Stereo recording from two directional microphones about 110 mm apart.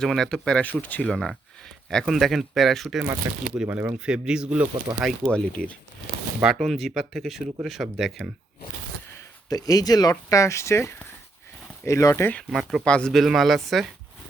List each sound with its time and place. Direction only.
0.0 s speech: 5° left (ahead or behind)
1.1 s speech: 5° left (ahead or behind)
3.3 s speech: 25° right (ahead or behind)
5.3 s speech: 10° left (ahead or behind)
6.4 s speech: 5° right (ahead or behind)
9.5 s speech: 35° left (ahead or behind)
12.5 s speech: centre (ahead or behind)
12.8 s speech: 10° left (ahead or behind)